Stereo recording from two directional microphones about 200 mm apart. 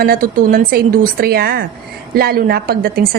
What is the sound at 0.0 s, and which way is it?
A woman's voice, 45° right (ahead or behind).